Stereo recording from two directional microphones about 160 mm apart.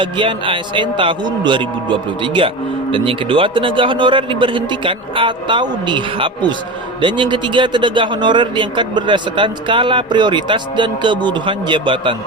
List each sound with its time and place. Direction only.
0.0 s a man's voice: 30° right (ahead or behind)